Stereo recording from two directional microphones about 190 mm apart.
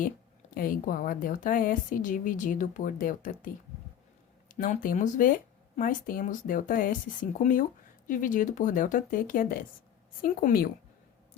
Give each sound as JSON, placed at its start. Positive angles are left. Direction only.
{"t": 0.5, "sound": "speech", "side_deg": 45}